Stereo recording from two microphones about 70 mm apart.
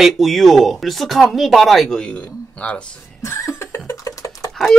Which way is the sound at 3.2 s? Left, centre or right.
Left.